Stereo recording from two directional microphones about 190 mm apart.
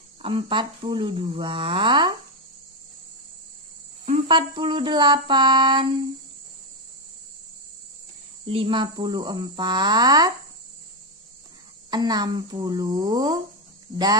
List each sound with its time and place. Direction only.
0.2 s speech: 25° right (ahead or behind)
4.3 s speech: 25° right (ahead or behind)
8.5 s speech: 30° right (ahead or behind)
11.9 s speech: 20° right (ahead or behind)